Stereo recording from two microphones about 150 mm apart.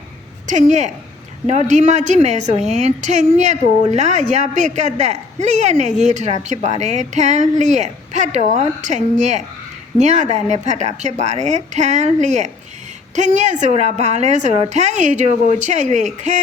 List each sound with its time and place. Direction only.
0.4 s speech: 55° right (ahead or behind)